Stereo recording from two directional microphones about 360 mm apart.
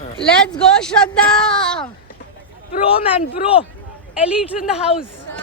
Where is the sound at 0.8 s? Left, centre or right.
Centre.